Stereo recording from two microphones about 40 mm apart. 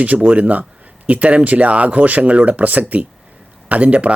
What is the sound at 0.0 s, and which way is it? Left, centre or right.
Speech, right.